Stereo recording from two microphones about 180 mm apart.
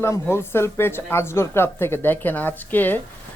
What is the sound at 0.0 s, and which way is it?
Speech, 15° left (ahead or behind).